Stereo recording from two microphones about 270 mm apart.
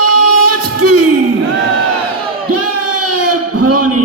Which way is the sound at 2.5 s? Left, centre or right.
Right.